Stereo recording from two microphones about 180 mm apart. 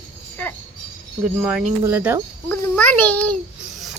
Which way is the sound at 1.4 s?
5° right (ahead or behind).